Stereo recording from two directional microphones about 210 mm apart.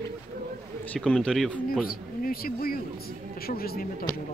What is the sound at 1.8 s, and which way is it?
Speech, 45° left (ahead or behind).